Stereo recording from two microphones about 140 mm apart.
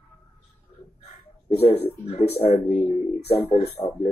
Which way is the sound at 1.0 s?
45° left (ahead or behind).